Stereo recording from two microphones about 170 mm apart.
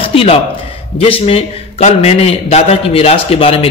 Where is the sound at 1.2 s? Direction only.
40° left (ahead or behind).